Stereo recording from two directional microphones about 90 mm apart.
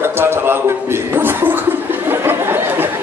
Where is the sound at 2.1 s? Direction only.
25° right (ahead or behind).